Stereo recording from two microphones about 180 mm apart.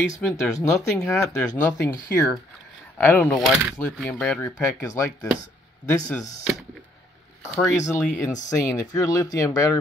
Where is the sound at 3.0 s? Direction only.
10° left (ahead or behind).